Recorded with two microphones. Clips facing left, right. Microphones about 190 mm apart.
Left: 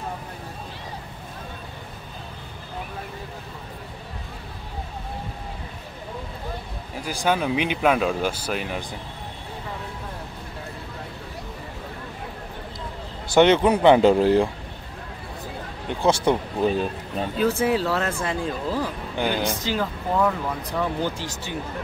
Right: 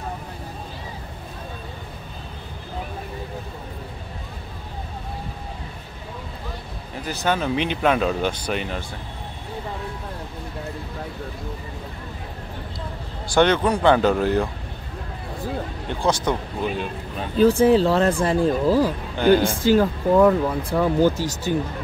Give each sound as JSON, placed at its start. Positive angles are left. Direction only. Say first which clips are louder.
{"t": 7.0, "sound": "speech", "louder": "even", "side_deg": 10}
{"t": 13.3, "sound": "speech", "louder": "left 2 dB", "side_deg": 20}
{"t": 16.1, "sound": "speech", "louder": "left 2 dB", "side_deg": 30}
{"t": 17.4, "sound": "speech", "louder": "right 7 dB", "side_deg": -30}